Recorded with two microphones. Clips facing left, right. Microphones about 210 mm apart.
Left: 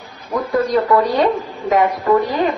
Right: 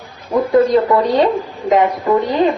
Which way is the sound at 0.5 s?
25° right (ahead or behind).